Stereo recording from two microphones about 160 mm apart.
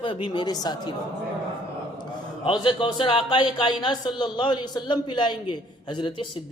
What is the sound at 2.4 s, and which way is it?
A woman's voice, 30° left (ahead or behind).